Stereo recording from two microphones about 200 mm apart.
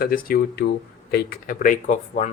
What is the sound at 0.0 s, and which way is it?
Speech, 45° left (ahead or behind).